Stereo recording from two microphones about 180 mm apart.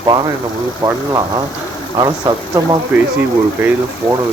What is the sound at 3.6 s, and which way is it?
Speech, 10° right (ahead or behind).